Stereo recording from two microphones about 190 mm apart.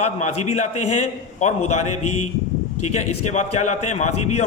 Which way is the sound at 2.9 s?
35° left (ahead or behind).